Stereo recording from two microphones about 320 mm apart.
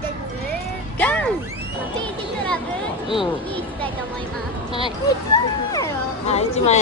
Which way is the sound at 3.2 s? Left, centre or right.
Centre.